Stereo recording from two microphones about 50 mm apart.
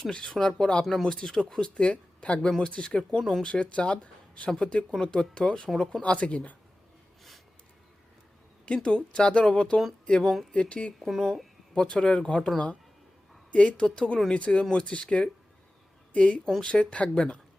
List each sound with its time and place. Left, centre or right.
0.1 s speech: centre
3.2 s speech: centre
3.4 s speech: left
5.7 s speech: centre
6.0 s speech: left
8.6 s speech: left
11.0 s speech: centre
11.7 s speech: centre
13.5 s speech: left